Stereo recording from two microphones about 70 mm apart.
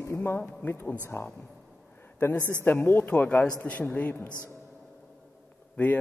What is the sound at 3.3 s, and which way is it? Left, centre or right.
Speech, centre.